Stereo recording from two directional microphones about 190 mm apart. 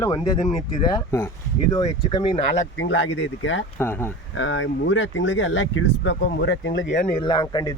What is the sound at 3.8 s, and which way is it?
Speech, 10° left (ahead or behind).